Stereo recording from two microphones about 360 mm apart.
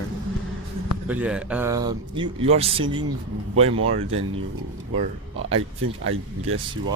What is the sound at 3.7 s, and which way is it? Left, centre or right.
Speech, right.